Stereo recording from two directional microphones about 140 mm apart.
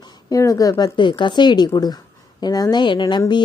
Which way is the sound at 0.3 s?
25° left (ahead or behind).